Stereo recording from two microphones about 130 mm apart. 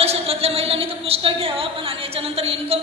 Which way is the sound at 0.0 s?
50° right (ahead or behind).